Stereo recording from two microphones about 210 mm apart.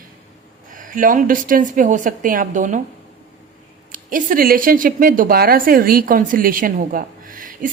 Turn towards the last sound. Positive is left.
turn(degrees=-40)  # may be behind; listen again after turning